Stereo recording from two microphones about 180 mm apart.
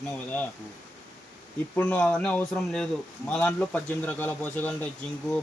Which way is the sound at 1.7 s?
5° left (ahead or behind).